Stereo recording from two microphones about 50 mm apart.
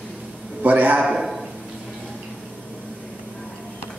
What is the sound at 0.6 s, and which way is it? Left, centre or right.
Speech, right.